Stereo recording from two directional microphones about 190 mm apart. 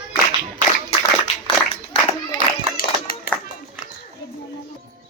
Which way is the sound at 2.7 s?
50° left (ahead or behind).